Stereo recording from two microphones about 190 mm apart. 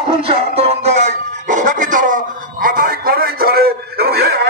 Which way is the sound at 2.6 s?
50° right (ahead or behind).